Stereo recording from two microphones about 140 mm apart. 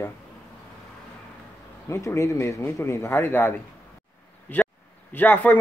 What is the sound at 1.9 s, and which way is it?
Speech, 20° left (ahead or behind).